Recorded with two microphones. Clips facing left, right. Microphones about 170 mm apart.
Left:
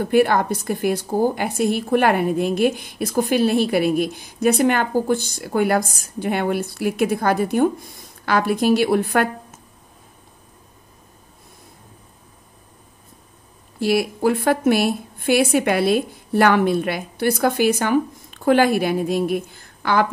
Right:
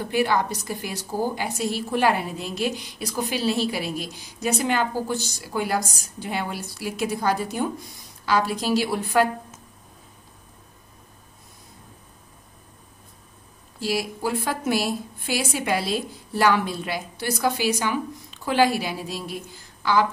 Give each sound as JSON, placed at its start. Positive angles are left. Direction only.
{"t": 0.0, "sound": "a woman's voice", "side_deg": 50}
{"t": 13.7, "sound": "a woman's voice", "side_deg": 60}